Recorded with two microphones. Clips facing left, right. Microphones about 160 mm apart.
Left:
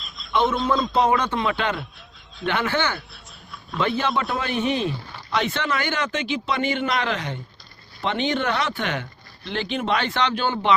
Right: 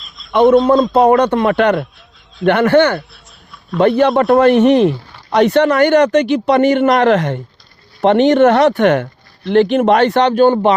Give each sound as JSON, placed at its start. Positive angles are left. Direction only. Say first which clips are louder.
{"t": 0.3, "sound": "a man's voice", "louder": "right 12 dB", "side_deg": -55}
{"t": 8.0, "sound": "speech", "louder": "right 14 dB", "side_deg": -65}
{"t": 8.9, "sound": "speech", "louder": "right 15 dB", "side_deg": -55}
{"t": 10.2, "sound": "speech", "louder": "right 13 dB", "side_deg": -45}